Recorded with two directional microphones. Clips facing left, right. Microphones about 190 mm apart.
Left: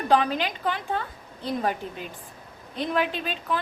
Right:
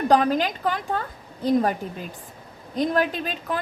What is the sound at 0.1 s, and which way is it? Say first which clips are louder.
A woman's voice: right 2 dB; 45° right (ahead or behind).